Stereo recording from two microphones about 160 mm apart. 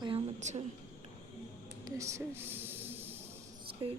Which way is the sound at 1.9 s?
20° right (ahead or behind).